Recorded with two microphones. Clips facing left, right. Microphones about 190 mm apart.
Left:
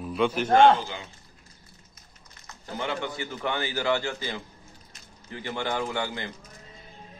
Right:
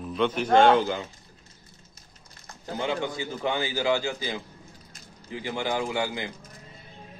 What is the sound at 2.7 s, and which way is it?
A man's voice, 15° right (ahead or behind).